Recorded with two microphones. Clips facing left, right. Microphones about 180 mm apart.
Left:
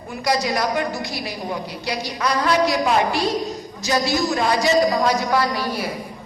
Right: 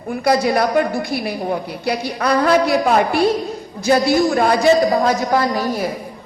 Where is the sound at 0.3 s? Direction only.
55° right (ahead or behind).